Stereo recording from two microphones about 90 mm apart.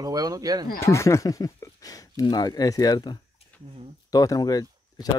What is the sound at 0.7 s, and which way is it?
Speech, 35° left (ahead or behind).